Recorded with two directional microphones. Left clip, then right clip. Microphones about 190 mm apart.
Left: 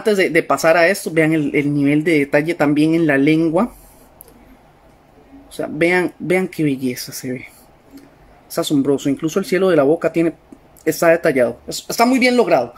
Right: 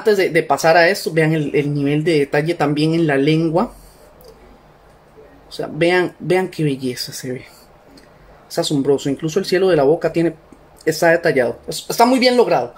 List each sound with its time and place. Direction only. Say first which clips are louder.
0.0 s speech: even; 30° left (ahead or behind)
5.6 s speech: even; 35° left (ahead or behind)
8.5 s speech: even; 35° left (ahead or behind)